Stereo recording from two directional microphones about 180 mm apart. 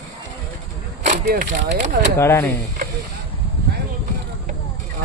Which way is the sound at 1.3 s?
50° right (ahead or behind).